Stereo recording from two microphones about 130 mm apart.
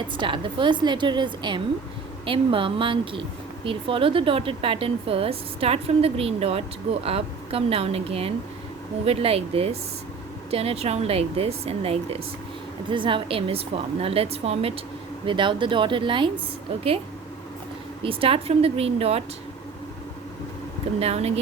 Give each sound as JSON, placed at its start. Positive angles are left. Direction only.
{"t": 0.2, "sound": "a woman's voice", "side_deg": -40}
{"t": 15.3, "sound": "a woman's voice", "side_deg": -40}
{"t": 18.0, "sound": "speech", "side_deg": -45}
{"t": 21.0, "sound": "speech", "side_deg": -55}